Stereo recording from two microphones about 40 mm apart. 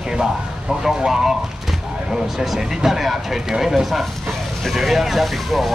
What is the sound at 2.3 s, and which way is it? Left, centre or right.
Speech, centre.